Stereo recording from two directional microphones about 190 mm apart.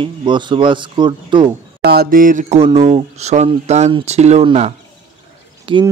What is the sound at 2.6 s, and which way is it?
Speech, 35° right (ahead or behind).